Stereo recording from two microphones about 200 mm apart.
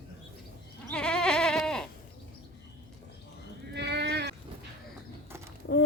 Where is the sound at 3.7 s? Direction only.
55° right (ahead or behind).